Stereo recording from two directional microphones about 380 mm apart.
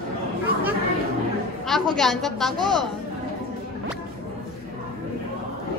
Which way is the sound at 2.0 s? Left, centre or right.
Centre.